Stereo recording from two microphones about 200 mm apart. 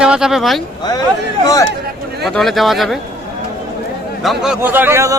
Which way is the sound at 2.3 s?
Centre (ahead or behind).